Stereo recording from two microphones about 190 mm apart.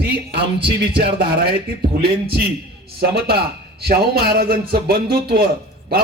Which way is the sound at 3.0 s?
55° right (ahead or behind).